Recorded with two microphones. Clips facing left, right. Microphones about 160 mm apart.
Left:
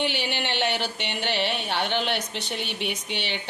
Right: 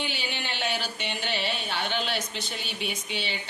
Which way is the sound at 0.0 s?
70° left (ahead or behind).